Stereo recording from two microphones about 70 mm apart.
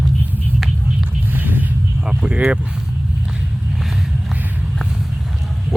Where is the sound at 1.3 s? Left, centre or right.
Right.